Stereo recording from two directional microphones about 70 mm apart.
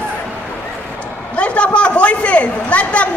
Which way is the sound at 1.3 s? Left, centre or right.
Centre.